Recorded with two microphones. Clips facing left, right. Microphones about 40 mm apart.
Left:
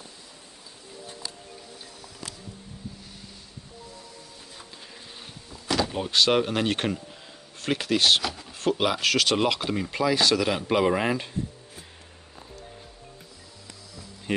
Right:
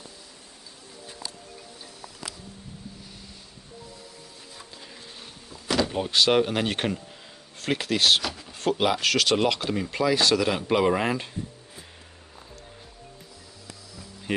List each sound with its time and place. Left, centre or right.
5.5 s speech: centre